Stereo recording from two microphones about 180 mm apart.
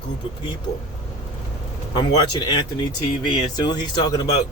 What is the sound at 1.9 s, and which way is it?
A man's voice, 25° left (ahead or behind).